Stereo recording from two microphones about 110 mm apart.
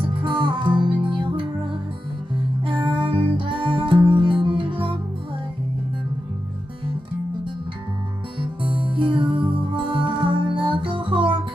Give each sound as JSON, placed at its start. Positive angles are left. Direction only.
{"t": 0.0, "sound": "music", "side_deg": -50}
{"t": 2.6, "sound": "music", "side_deg": -50}
{"t": 8.4, "sound": "music", "side_deg": -50}